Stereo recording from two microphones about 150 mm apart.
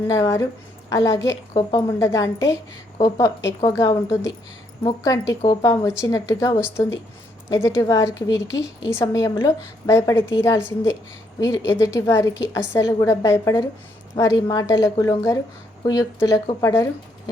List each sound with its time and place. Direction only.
0.1 s a woman's voice: 25° left (ahead or behind)